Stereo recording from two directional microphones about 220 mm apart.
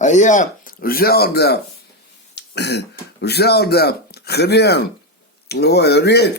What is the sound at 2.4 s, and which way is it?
Throat clearing, 50° left (ahead or behind).